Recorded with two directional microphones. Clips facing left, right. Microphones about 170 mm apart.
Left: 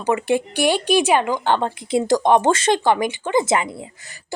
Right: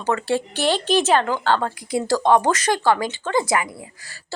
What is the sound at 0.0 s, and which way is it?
A woman's voice, 15° left (ahead or behind).